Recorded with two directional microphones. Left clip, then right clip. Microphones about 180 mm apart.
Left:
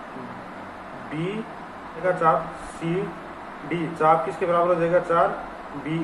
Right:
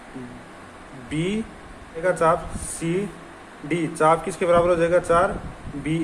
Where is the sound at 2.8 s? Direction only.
35° right (ahead or behind).